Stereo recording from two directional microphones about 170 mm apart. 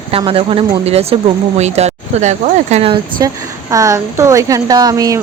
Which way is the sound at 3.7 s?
20° right (ahead or behind).